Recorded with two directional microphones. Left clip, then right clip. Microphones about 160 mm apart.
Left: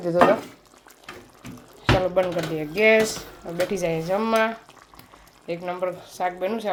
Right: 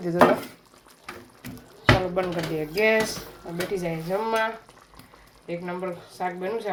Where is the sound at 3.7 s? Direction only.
55° left (ahead or behind).